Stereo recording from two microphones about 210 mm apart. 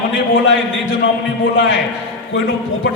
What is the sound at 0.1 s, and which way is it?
Speech, 60° left (ahead or behind).